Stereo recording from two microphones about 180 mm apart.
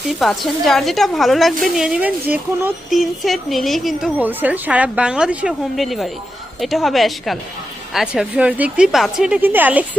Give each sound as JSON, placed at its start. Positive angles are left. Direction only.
{"t": 0.2, "sound": "a woman's voice", "side_deg": 0}